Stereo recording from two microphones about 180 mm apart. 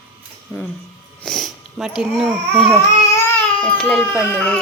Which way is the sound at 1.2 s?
Centre (ahead or behind).